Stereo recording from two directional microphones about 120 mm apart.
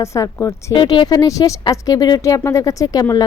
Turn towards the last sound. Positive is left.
turn(degrees=30)  # may be behind; listen again after turning